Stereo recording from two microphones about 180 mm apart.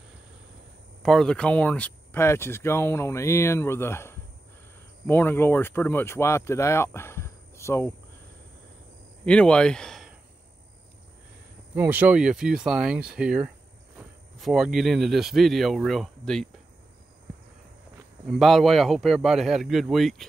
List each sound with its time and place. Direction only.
1.0 s speech: 5° left (ahead or behind)
9.2 s speech: 5° left (ahead or behind)
11.7 s a man's voice: 10° right (ahead or behind)
18.2 s a man's voice: centre (ahead or behind)